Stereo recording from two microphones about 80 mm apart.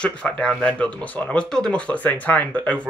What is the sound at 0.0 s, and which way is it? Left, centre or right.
Speech, centre.